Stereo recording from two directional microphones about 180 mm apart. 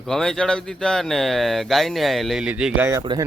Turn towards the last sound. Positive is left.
turn(degrees=-25)  # may be behind; listen again after turning